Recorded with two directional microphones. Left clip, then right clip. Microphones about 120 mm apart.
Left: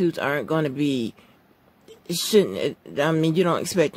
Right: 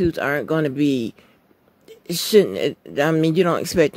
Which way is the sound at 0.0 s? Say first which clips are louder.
Right 2 dB; 30° right (ahead or behind).